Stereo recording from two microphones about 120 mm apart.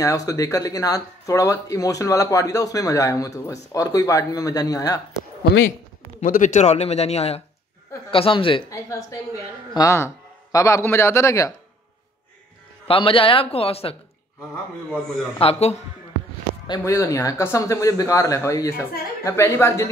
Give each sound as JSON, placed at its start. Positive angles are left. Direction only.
{"t": 0.0, "sound": "speech", "side_deg": 30}
{"t": 6.4, "sound": "speech", "side_deg": 75}
{"t": 8.1, "sound": "a man's voice", "side_deg": 45}
{"t": 8.6, "sound": "speech", "side_deg": 25}
{"t": 12.8, "sound": "a man's voice", "side_deg": 50}
{"t": 15.3, "sound": "speech", "side_deg": 60}
{"t": 16.8, "sound": "speech", "side_deg": 30}